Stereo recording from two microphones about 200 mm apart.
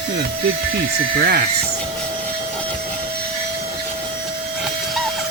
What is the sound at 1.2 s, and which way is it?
Speech, 50° right (ahead or behind).